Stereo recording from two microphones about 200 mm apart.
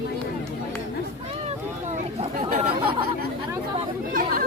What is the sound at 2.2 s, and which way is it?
Chatter, 35° right (ahead or behind).